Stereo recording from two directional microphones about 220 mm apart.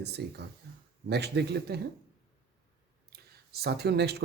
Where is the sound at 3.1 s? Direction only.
45° right (ahead or behind).